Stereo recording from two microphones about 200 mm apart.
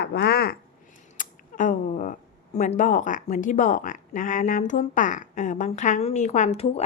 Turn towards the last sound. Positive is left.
turn(degrees=30)  # may be behind; listen again after turning